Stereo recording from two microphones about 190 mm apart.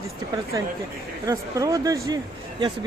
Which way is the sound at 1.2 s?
20° right (ahead or behind).